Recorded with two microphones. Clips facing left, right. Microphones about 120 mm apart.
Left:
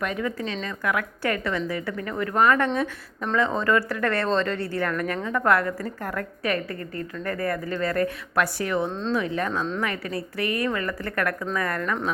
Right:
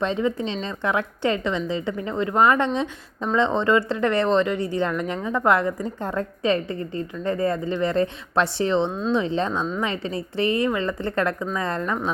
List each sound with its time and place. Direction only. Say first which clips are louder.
0.0 s speech: right 4 dB; 25° right (ahead or behind)